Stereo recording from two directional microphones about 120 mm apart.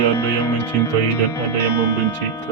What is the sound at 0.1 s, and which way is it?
Speech, 20° left (ahead or behind).